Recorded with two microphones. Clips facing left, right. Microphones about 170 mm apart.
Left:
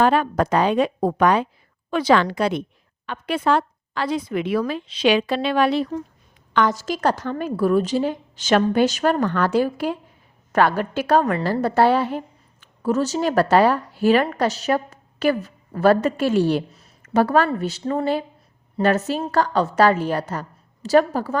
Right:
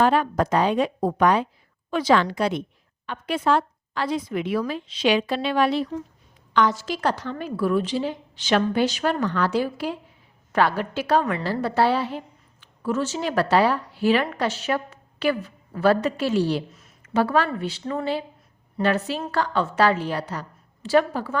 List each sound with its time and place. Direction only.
0.0 s a woman's voice: 65° left (ahead or behind)
6.5 s a woman's voice: 50° left (ahead or behind)